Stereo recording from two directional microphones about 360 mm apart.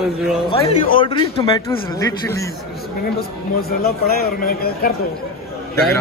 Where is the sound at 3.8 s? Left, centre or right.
Left.